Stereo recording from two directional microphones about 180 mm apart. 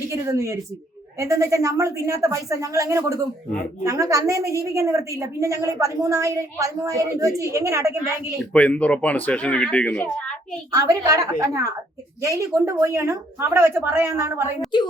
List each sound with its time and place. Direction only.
0.1 s a woman's voice: 15° right (ahead or behind)
8.5 s speech: 5° left (ahead or behind)
10.7 s a woman's voice: 20° right (ahead or behind)